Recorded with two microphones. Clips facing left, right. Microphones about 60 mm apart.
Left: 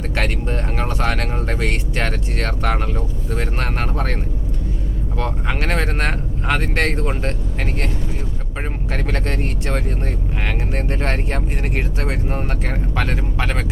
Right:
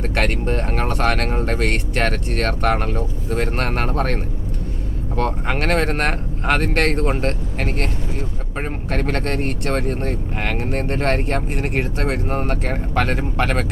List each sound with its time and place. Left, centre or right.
0.1 s speech: right
8.9 s speech: right